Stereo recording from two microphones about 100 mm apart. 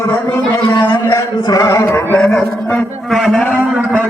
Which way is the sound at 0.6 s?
45° left (ahead or behind).